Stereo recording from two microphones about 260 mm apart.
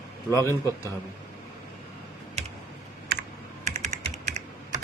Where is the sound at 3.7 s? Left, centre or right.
Right.